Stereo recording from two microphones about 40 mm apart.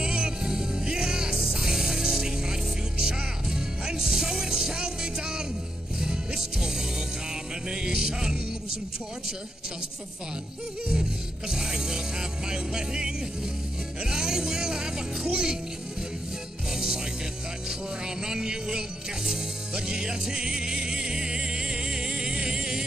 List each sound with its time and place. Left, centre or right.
0.0 s music: centre
10.9 s music: centre
16.7 s music: centre